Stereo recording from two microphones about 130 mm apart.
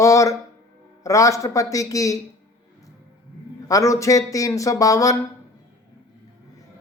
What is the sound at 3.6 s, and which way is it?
Speech, 25° left (ahead or behind).